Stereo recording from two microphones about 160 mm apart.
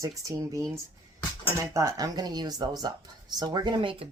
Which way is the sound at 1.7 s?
20° right (ahead or behind).